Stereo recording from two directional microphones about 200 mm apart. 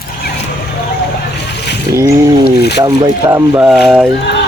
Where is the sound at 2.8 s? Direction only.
15° right (ahead or behind).